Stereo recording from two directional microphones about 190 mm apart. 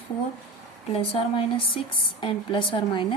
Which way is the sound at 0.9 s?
30° left (ahead or behind).